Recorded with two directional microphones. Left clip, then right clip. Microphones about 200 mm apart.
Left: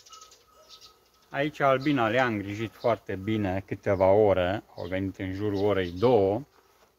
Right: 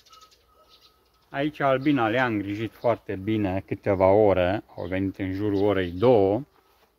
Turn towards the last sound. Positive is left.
turn(degrees=-55)  # may be behind; listen again after turning